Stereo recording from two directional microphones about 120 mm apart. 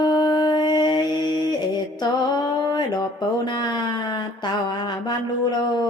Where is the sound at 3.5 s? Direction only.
40° left (ahead or behind).